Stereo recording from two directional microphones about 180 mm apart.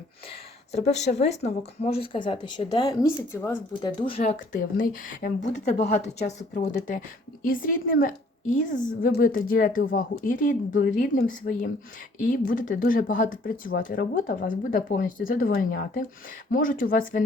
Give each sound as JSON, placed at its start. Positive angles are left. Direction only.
{"t": 0.3, "sound": "a woman's voice", "side_deg": 35}
{"t": 4.0, "sound": "speech", "side_deg": 30}
{"t": 4.5, "sound": "a woman's voice", "side_deg": 50}